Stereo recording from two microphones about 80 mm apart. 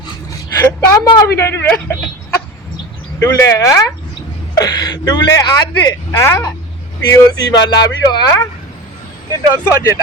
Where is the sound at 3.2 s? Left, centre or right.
Left.